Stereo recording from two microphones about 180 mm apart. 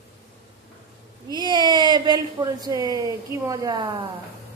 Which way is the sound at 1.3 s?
25° right (ahead or behind).